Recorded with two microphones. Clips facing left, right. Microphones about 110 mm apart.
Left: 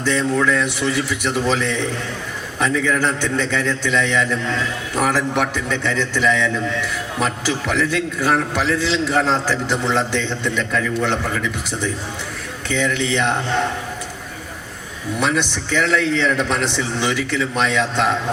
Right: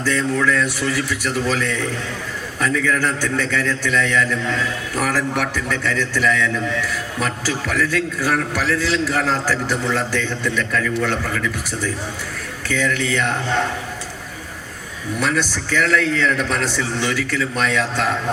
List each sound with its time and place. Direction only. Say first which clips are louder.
0.0 s a man's voice: left 1 dB; 20° left (ahead or behind)
15.1 s a man's voice: left 1 dB; 20° left (ahead or behind)